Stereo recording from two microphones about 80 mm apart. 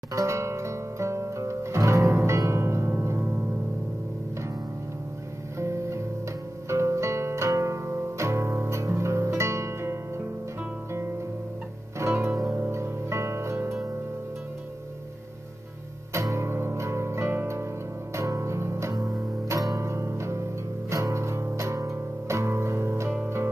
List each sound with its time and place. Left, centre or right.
0.1 s music: right
5.6 s music: right
12.0 s music: right
16.1 s music: right